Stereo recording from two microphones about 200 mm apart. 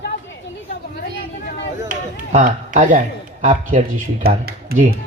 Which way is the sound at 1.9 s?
40° right (ahead or behind).